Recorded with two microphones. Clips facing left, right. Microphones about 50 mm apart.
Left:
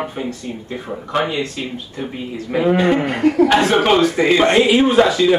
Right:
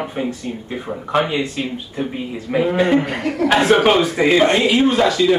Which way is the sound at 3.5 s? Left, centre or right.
Centre.